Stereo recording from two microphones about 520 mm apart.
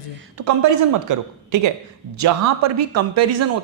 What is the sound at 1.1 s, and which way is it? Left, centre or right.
A woman's voice, right.